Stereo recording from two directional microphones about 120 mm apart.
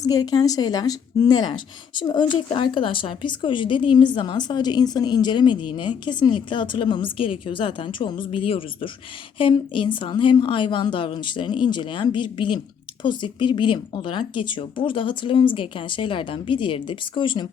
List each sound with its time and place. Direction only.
0.0 s speech: 30° left (ahead or behind)